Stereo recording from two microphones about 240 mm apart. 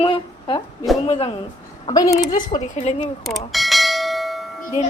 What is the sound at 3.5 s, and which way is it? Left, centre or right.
Bell, centre.